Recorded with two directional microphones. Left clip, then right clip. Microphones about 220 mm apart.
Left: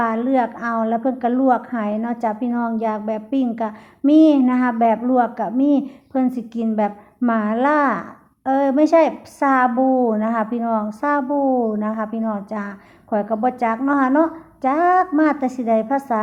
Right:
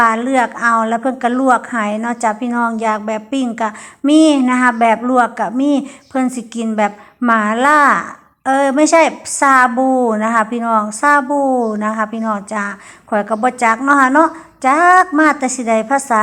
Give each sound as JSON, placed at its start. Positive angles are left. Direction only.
{"t": 0.0, "sound": "a woman's voice", "side_deg": -10}
{"t": 11.3, "sound": "a woman's voice", "side_deg": -25}
{"t": 11.7, "sound": "a woman's voice", "side_deg": -10}